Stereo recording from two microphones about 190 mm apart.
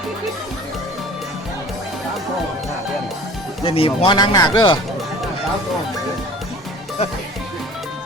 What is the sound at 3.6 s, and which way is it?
Speech, 30° left (ahead or behind).